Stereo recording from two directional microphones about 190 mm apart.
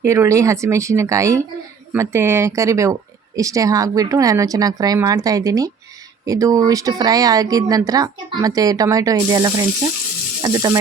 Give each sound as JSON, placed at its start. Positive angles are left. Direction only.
{"t": 0.0, "sound": "speech", "side_deg": -15}